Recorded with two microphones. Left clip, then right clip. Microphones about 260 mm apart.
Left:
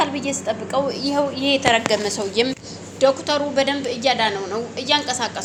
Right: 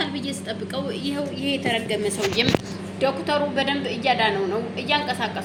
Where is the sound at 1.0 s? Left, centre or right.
Centre.